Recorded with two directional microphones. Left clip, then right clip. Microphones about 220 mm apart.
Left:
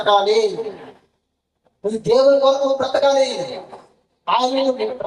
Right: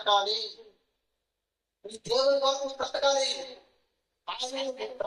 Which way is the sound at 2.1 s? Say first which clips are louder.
Left 11 dB; 20° left (ahead or behind).